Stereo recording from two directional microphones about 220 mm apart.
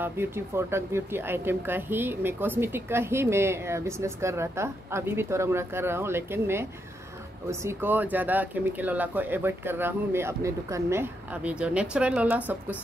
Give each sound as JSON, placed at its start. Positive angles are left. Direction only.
{"t": 0.0, "sound": "speech", "side_deg": -10}